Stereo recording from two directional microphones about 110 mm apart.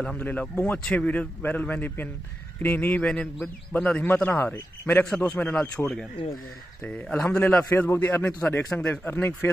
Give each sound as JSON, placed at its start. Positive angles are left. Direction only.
{"t": 0.0, "sound": "a man's voice", "side_deg": 10}